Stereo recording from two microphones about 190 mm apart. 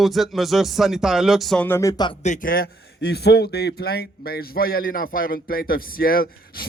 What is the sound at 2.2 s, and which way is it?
A man's voice, 45° left (ahead or behind).